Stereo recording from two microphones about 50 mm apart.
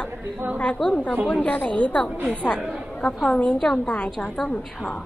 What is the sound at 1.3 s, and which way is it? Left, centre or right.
Speech, left.